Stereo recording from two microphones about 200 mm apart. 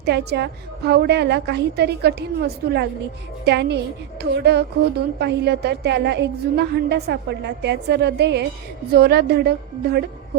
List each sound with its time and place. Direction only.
0.0 s a woman's voice: 55° right (ahead or behind)
3.4 s a woman's voice: 55° right (ahead or behind)